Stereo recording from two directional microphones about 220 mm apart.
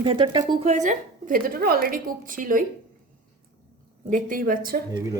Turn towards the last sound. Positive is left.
turn(degrees=-15)  # may be behind; listen again after turning